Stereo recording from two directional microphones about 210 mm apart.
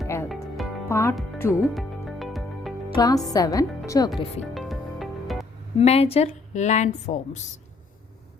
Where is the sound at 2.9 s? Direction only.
15° left (ahead or behind).